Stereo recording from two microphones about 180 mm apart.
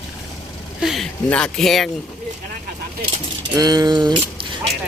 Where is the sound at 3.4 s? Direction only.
20° right (ahead or behind).